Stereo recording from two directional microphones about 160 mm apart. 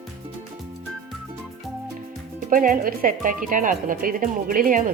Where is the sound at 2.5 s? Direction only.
60° right (ahead or behind).